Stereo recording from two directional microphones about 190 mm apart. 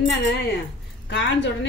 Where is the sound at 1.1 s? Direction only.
70° left (ahead or behind).